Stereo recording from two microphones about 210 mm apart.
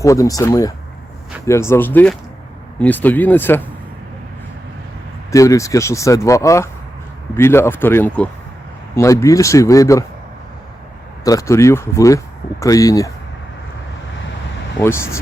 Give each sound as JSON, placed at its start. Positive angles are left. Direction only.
{"t": 0.0, "sound": "speech", "side_deg": 15}
{"t": 5.3, "sound": "speech", "side_deg": 15}
{"t": 11.3, "sound": "speech", "side_deg": 15}
{"t": 14.8, "sound": "speech", "side_deg": 10}